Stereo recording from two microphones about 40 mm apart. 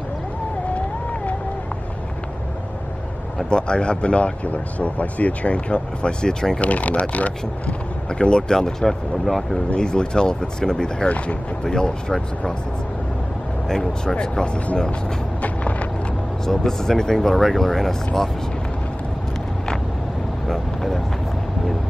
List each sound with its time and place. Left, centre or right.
3.4 s speech: left
6.6 s speech: left
8.2 s speech: left; by 9.6 s centre
9.8 s speech: centre
11.1 s speech: left
11.6 s speech: centre
13.7 s speech: centre
14.1 s speech: left
15.4 s vehicle: left
16.4 s speech: centre
20.4 s vehicle: centre